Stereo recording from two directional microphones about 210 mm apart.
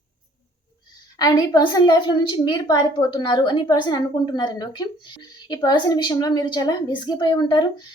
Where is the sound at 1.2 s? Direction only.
20° left (ahead or behind).